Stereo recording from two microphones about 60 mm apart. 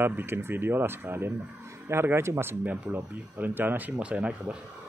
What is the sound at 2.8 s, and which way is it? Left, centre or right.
Speech, right.